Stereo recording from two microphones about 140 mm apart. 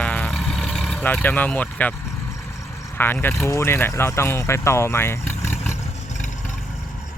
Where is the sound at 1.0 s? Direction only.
10° left (ahead or behind).